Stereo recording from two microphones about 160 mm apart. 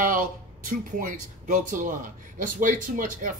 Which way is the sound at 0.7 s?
55° right (ahead or behind).